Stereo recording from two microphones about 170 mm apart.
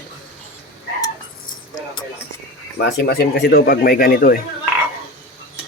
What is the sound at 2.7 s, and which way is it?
Speech, 70° left (ahead or behind).